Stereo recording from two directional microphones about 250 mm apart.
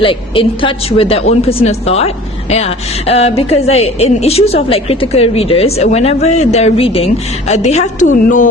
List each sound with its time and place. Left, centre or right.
0.0 s a woman's voice: left